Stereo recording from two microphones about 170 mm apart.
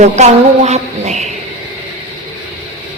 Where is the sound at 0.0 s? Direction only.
40° right (ahead or behind).